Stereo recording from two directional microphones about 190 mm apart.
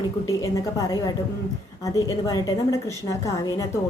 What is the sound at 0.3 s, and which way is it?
A woman's voice, 15° left (ahead or behind).